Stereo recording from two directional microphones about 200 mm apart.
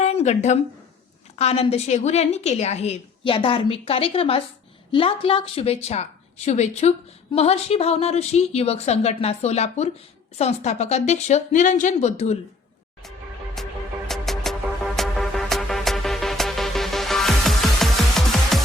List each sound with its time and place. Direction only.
0.0 s a sound: 30° left (ahead or behind)
1.4 s a woman's voice: 30° left (ahead or behind)
13.6 s music: centre (ahead or behind)